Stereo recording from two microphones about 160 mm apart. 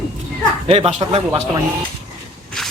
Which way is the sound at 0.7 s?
40° right (ahead or behind).